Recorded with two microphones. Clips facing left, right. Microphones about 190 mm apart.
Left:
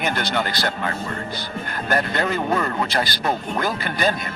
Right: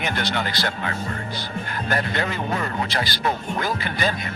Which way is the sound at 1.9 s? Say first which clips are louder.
Left 4 dB; 45° left (ahead or behind).